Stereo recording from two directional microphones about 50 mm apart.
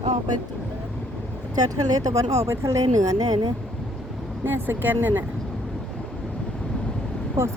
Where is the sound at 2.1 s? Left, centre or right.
Right.